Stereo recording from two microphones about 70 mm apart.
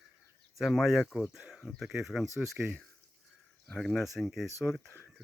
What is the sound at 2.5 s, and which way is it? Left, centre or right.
Speech, centre.